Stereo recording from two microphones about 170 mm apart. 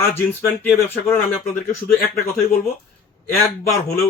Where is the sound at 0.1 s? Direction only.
10° left (ahead or behind).